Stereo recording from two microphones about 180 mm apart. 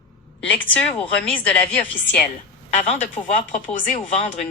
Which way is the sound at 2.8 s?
40° left (ahead or behind).